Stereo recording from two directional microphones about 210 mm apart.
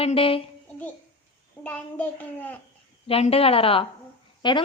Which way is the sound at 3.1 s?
25° left (ahead or behind).